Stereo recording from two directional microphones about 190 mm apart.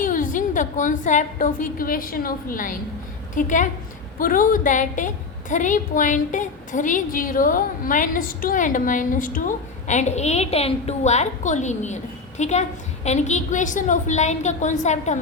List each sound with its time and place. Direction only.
0.0 s a woman's voice: 45° left (ahead or behind)